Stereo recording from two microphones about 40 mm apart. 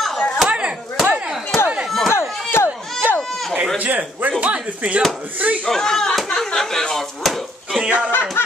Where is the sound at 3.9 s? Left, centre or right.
Right.